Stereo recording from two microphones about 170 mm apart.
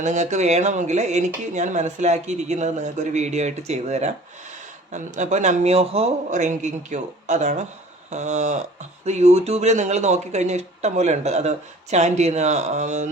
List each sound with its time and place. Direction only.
0.0 s speech: 45° right (ahead or behind)